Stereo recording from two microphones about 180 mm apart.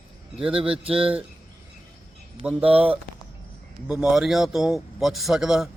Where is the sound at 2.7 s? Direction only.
10° right (ahead or behind).